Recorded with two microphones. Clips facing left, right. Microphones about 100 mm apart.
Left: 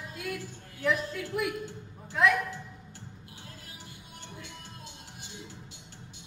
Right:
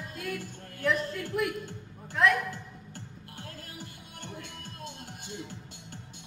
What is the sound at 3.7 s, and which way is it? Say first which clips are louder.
Music: right 4 dB; 50° right (ahead or behind).